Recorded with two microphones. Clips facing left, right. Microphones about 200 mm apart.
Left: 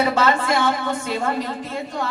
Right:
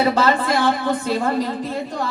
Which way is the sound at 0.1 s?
35° right (ahead or behind).